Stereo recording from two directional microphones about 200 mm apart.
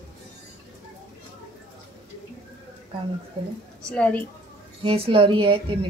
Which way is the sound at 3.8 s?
5° left (ahead or behind).